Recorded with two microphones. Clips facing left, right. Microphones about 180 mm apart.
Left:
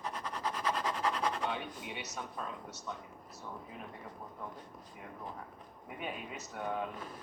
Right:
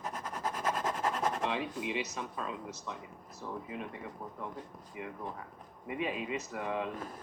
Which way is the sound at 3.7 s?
90° right.